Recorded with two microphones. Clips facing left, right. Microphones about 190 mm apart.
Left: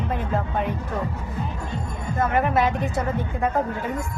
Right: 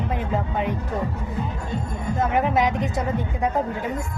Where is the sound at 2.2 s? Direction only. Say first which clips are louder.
Even; 15° right (ahead or behind).